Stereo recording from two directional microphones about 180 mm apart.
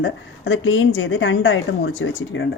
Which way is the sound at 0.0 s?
90° left.